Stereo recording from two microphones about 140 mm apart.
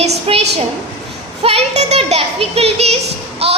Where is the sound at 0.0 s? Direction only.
45° right (ahead or behind).